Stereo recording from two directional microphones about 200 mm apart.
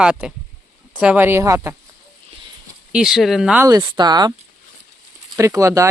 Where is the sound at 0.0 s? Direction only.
5° right (ahead or behind).